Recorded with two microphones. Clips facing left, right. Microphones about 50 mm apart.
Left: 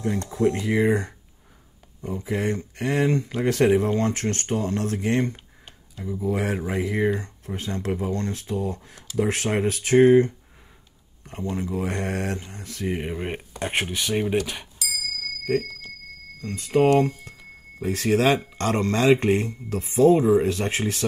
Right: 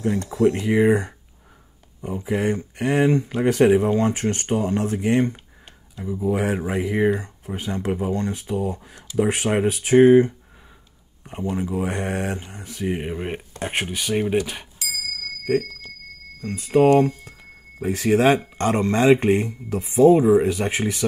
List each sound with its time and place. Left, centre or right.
0.1 s speech: right
13.0 s speech: centre
14.8 s bicycle bell: right
16.4 s speech: right